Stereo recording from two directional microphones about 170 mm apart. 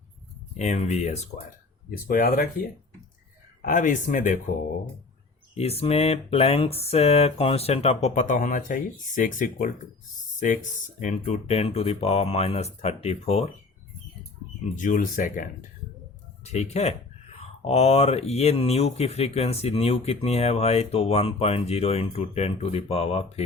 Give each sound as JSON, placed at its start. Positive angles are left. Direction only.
{"t": 0.5, "sound": "speech", "side_deg": 40}
{"t": 1.9, "sound": "speech", "side_deg": 55}
{"t": 5.5, "sound": "speech", "side_deg": 35}
{"t": 14.8, "sound": "speech", "side_deg": 50}
{"t": 16.4, "sound": "speech", "side_deg": 40}